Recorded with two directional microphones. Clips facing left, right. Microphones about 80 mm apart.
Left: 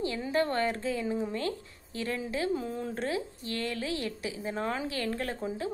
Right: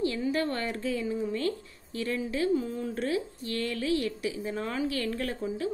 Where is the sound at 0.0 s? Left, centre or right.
Left.